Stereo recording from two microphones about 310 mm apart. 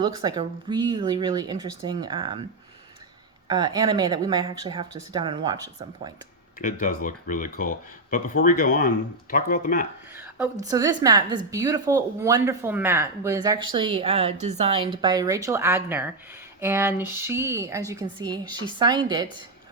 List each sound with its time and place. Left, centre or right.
0.0 s a woman's voice: centre
3.4 s a woman's voice: centre
6.6 s speech: left
10.2 s a sound: centre
10.7 s a woman's voice: centre